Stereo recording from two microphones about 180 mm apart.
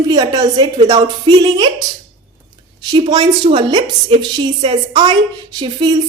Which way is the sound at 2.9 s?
25° right (ahead or behind).